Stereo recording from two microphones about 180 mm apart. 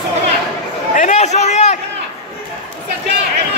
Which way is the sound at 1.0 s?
40° left (ahead or behind).